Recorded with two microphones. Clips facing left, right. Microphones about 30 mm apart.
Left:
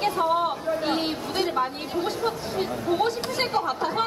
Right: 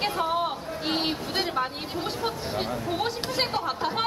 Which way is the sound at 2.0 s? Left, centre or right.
Right.